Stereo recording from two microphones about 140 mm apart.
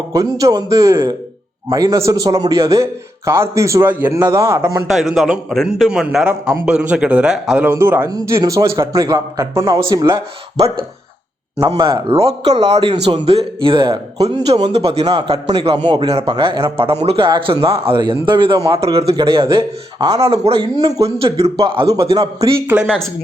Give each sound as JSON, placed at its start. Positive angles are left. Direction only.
{"t": 0.1, "sound": "speech", "side_deg": -25}
{"t": 4.9, "sound": "a man's voice", "side_deg": 0}
{"t": 11.8, "sound": "speech", "side_deg": -20}
{"t": 12.0, "sound": "a man's voice", "side_deg": -45}
{"t": 12.9, "sound": "a man's voice", "side_deg": -35}
{"t": 16.0, "sound": "a man's voice", "side_deg": -45}
{"t": 22.4, "sound": "a man's voice", "side_deg": -15}